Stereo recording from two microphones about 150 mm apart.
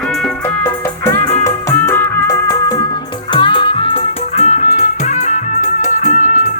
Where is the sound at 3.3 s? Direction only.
35° left (ahead or behind).